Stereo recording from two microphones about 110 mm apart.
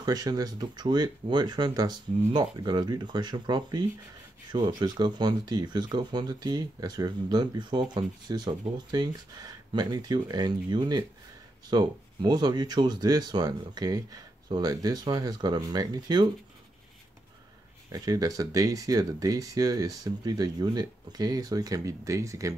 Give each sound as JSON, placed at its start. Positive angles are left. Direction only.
{"t": 0.0, "sound": "speech", "side_deg": -35}
{"t": 17.9, "sound": "speech", "side_deg": -30}